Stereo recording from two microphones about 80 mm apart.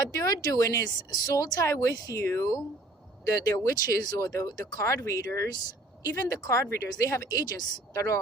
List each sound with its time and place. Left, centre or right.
0.0 s speech: left